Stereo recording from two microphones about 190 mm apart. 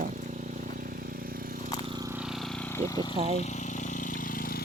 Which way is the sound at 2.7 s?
15° left (ahead or behind).